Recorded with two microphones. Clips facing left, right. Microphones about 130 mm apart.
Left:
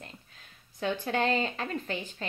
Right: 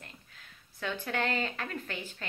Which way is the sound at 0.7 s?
20° left (ahead or behind).